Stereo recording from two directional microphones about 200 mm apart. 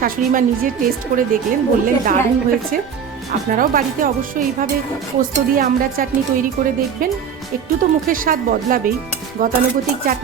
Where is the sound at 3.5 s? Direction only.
45° right (ahead or behind).